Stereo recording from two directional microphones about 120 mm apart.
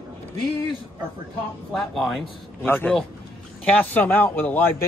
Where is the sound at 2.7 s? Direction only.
15° left (ahead or behind).